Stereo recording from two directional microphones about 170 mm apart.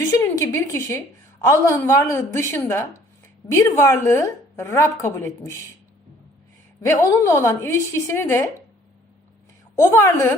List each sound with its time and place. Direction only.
0.1 s a woman's voice: 15° left (ahead or behind)
6.8 s a woman's voice: 15° left (ahead or behind)
9.7 s a woman's voice: 15° left (ahead or behind)